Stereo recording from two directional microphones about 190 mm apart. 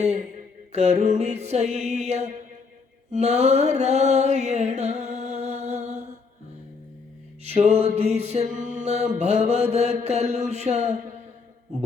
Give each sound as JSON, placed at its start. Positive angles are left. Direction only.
{"t": 0.0, "sound": "mantra", "side_deg": -35}
{"t": 7.4, "sound": "mantra", "side_deg": -35}